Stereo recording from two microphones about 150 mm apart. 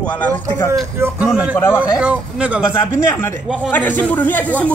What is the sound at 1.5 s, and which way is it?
Speech, 20° left (ahead or behind).